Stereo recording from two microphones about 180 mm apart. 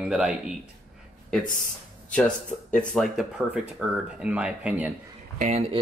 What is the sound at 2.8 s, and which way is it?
Speech, centre (ahead or behind).